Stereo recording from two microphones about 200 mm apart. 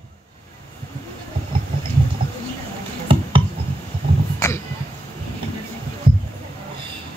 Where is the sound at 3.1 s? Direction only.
25° right (ahead or behind).